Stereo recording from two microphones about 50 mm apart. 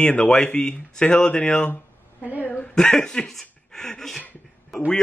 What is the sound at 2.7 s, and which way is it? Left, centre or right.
Speech, centre.